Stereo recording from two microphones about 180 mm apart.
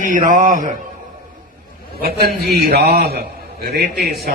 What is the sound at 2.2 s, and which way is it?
A man's voice, 60° right (ahead or behind).